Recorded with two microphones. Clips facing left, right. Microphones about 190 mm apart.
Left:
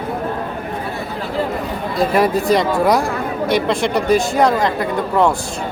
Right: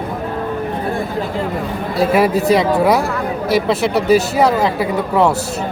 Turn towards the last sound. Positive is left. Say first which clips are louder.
# right 1 dB
turn(degrees=-5)  # may be behind; listen again after turning